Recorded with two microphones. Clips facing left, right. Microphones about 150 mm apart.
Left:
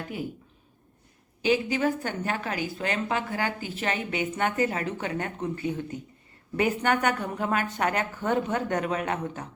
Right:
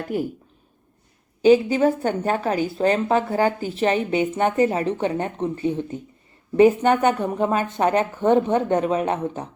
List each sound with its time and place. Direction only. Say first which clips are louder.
1.4 s a woman's voice: right 9 dB; 30° right (ahead or behind)